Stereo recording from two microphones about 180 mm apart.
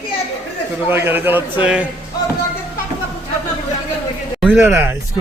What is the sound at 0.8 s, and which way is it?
A man's voice, 10° right (ahead or behind).